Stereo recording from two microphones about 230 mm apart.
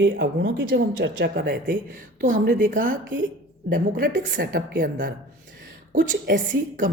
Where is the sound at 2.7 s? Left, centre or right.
Right.